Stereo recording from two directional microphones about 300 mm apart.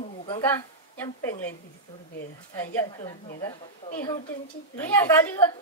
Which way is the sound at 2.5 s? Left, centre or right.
Centre.